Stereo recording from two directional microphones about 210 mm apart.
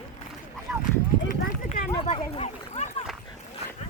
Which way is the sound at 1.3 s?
40° left (ahead or behind).